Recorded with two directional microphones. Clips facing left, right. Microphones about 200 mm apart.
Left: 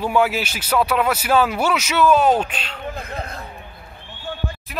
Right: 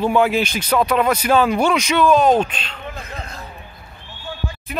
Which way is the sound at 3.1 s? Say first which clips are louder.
Left 3 dB; 55° left (ahead or behind).